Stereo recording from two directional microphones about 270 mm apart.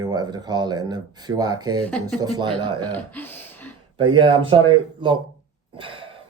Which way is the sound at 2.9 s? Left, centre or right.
Centre.